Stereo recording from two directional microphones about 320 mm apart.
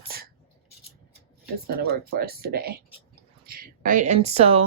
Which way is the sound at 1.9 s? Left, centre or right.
Right.